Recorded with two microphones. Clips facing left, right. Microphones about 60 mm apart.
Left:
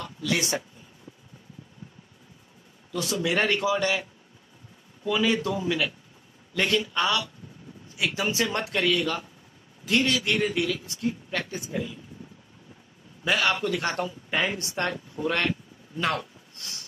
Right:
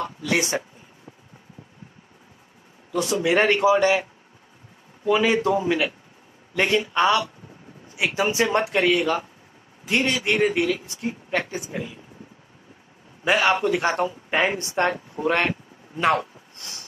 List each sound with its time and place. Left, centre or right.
0.0 s speech: right
2.9 s speech: right
13.2 s speech: right